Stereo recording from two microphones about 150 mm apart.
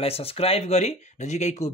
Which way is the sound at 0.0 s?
40° left (ahead or behind).